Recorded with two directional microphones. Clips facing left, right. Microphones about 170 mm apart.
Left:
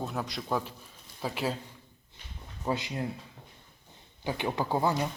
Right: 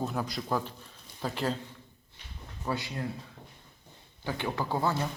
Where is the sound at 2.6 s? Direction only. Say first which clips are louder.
Left 2 dB; 20° left (ahead or behind).